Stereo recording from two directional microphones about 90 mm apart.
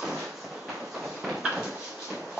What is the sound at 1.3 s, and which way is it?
Sliding door, 10° right (ahead or behind).